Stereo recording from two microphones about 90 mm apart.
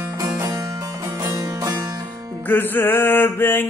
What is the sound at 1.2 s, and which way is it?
Music, 35° right (ahead or behind).